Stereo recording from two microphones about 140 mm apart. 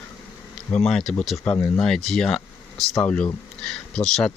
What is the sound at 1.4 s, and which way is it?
Speech, 15° left (ahead or behind).